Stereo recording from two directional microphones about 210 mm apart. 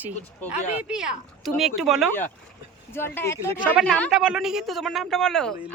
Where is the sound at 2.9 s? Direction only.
10° left (ahead or behind).